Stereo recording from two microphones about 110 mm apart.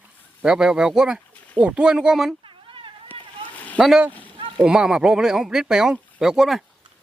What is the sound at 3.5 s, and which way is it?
Boat, 15° left (ahead or behind).